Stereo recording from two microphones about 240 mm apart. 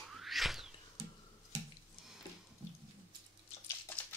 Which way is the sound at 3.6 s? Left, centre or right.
Centre.